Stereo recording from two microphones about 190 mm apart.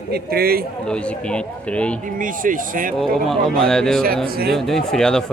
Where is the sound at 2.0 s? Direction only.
45° right (ahead or behind).